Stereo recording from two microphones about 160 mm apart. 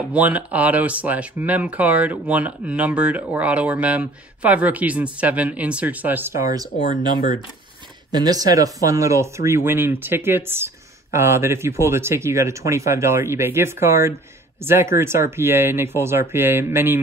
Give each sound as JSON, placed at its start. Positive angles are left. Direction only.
{"t": 0.0, "sound": "speech", "side_deg": -10}